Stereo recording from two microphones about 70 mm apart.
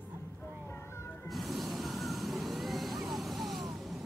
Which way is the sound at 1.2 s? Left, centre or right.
Centre.